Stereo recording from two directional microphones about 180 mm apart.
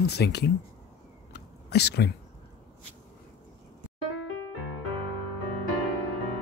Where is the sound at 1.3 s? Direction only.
65° left (ahead or behind).